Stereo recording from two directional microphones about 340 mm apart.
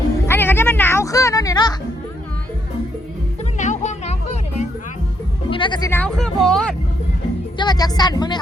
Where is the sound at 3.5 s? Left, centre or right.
Left.